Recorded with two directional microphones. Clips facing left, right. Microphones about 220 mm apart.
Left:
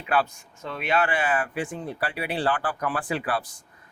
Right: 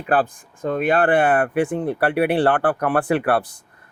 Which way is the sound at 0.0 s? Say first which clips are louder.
Right 5 dB; 50° right (ahead or behind).